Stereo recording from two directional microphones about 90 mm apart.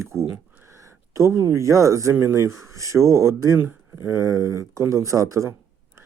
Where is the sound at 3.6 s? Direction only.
20° right (ahead or behind); by 5.5 s 35° right (ahead or behind).